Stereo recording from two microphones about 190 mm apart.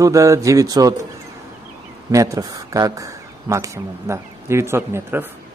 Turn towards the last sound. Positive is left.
turn(degrees=-10)  # may be behind; listen again after turning